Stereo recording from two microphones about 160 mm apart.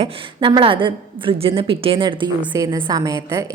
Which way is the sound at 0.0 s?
30° right (ahead or behind).